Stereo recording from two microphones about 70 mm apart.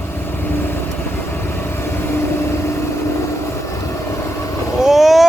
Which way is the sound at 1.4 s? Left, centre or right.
Left.